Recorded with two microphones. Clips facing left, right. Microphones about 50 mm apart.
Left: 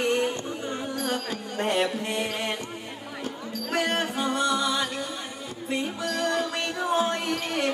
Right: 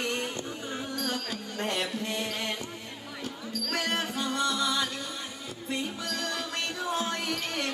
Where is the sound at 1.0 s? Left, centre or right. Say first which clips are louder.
Left 4 dB; left.